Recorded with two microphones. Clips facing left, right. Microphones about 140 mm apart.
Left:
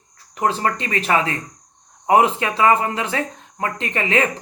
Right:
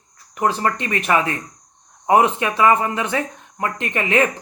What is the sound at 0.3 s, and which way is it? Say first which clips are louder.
Speech: even; 30° left (ahead or behind).